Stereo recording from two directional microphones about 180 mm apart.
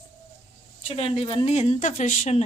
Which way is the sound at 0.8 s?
30° left (ahead or behind).